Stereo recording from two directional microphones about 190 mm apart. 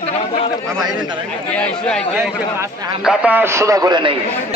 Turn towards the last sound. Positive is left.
turn(degrees=-25)  # may be behind; listen again after turning